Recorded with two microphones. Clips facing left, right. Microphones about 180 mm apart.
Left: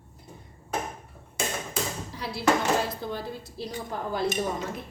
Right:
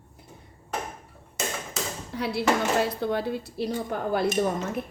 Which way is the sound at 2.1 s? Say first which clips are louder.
Right 1 dB; 60° right (ahead or behind).